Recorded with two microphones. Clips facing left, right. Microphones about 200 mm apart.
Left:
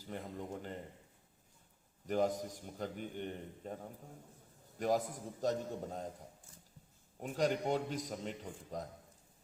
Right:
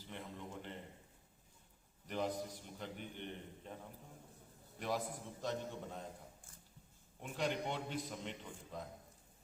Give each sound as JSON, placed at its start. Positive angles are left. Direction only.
{"t": 0.0, "sound": "a sound", "side_deg": 40}
{"t": 2.0, "sound": "a man's voice", "side_deg": 45}
{"t": 7.2, "sound": "a man's voice", "side_deg": 40}